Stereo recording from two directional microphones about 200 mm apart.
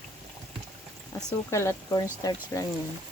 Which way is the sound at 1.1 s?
15° left (ahead or behind).